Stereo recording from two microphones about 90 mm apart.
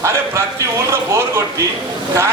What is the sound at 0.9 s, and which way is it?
Speech, 30° right (ahead or behind).